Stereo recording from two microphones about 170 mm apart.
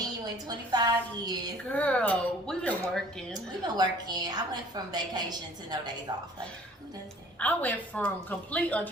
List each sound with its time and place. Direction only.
0.4 s a woman's voice: 25° right (ahead or behind)
1.7 s speech: 10° left (ahead or behind)
3.8 s a woman's voice: 25° right (ahead or behind)
7.3 s speech: 10° left (ahead or behind)